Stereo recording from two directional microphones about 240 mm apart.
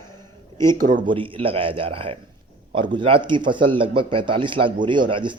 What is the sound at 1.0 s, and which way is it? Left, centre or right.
A man's voice, right.